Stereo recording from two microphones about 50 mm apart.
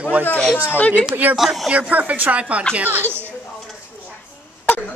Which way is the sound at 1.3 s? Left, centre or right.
Centre.